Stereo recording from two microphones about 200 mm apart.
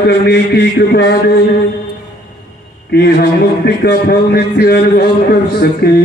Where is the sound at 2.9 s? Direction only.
50° left (ahead or behind).